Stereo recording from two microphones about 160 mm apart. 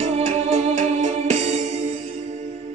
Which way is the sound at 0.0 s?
45° right (ahead or behind).